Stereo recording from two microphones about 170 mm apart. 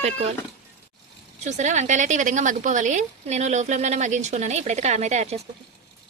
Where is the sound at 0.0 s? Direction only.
40° right (ahead or behind).